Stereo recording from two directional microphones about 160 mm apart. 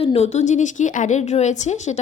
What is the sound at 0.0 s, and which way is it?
Speech, 40° left (ahead or behind).